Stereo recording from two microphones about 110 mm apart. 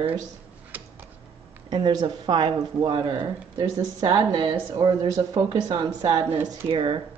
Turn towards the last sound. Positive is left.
turn(degrees=-50)  # may be behind; listen again after turning